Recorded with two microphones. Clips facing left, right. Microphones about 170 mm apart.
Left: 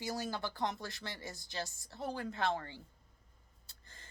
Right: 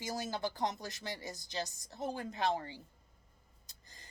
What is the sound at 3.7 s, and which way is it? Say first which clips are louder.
Gasp: left 1 dB; 15° right (ahead or behind).